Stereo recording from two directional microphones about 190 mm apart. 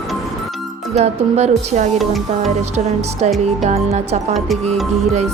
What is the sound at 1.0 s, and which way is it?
Speech, 35° right (ahead or behind).